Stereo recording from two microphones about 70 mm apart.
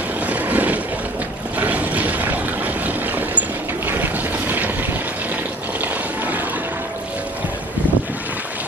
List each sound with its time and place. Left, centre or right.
0.3 s vehicle: right
1.6 s boat: right
5.8 s a sound: right